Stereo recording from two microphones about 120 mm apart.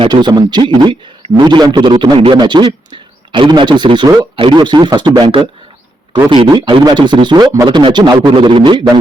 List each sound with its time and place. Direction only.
0.1 s a man's voice: 35° right (ahead or behind)